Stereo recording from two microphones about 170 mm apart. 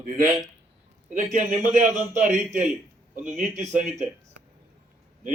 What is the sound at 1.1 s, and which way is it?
Speech, 45° right (ahead or behind).